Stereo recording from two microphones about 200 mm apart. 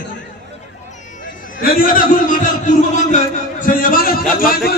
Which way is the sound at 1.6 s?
45° left (ahead or behind).